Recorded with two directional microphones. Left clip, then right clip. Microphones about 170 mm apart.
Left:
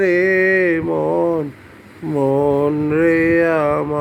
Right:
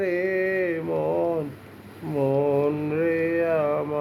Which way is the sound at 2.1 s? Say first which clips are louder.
Left 6 dB; 30° left (ahead or behind).